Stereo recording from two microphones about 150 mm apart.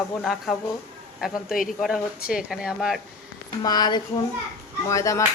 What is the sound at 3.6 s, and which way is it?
Speech, 25° left (ahead or behind).